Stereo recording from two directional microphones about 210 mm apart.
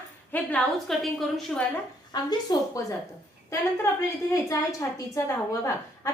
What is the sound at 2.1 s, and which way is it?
Speech, 20° left (ahead or behind).